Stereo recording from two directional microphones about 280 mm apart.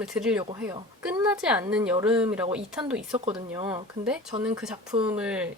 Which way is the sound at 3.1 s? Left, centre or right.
Centre.